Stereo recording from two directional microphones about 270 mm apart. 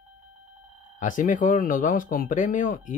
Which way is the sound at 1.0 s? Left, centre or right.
Left.